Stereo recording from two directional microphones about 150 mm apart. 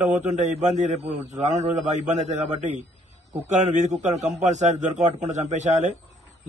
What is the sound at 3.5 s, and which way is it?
A man's voice, 50° right (ahead or behind).